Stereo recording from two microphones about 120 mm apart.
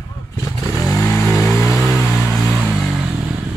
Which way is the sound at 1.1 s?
20° left (ahead or behind).